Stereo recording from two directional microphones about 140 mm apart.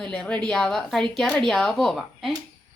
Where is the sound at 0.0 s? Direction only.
5° left (ahead or behind).